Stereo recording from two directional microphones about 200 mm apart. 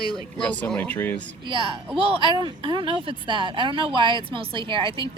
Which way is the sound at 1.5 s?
25° right (ahead or behind).